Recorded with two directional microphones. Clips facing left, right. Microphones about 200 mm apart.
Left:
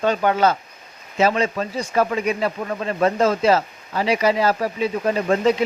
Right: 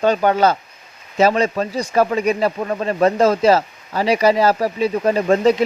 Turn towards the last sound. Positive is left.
turn(degrees=-35)  # may be behind; listen again after turning